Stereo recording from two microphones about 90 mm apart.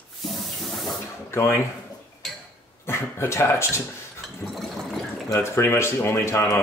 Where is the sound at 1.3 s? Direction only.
30° left (ahead or behind).